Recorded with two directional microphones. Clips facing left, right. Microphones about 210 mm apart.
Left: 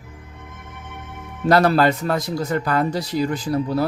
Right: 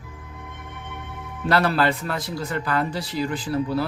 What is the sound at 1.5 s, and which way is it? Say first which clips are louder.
A man's voice: left 5 dB; 40° left (ahead or behind).